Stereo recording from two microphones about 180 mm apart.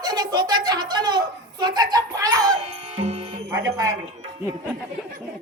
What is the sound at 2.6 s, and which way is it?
Music, 35° right (ahead or behind).